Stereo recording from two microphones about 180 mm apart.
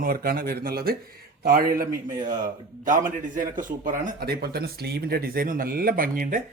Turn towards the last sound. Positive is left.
turn(degrees=-50)  # may be behind; listen again after turning